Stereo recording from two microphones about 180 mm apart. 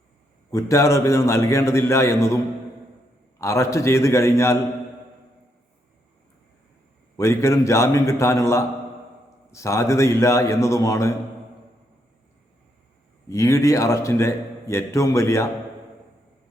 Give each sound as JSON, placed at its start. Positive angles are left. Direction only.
{"t": 0.5, "sound": "a man's voice", "side_deg": 15}
{"t": 3.4, "sound": "a man's voice", "side_deg": 15}
{"t": 7.2, "sound": "a man's voice", "side_deg": 15}
{"t": 13.2, "sound": "a man's voice", "side_deg": 15}